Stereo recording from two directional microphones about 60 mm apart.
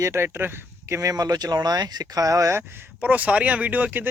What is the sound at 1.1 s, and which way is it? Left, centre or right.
Speech, right.